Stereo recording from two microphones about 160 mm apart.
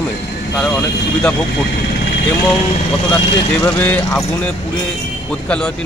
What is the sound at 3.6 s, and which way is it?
Speech, 10° left (ahead or behind).